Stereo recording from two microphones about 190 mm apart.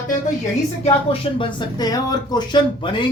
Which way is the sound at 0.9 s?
30° left (ahead or behind).